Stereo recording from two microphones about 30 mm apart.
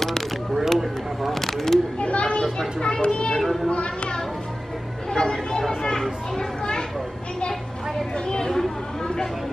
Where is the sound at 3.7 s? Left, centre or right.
Left.